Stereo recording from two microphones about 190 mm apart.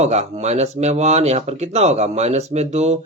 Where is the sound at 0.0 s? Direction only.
35° right (ahead or behind).